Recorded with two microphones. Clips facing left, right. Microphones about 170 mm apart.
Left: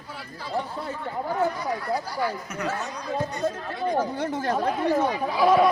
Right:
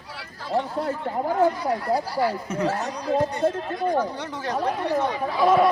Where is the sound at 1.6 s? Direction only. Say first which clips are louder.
Right 4 dB; 30° right (ahead or behind).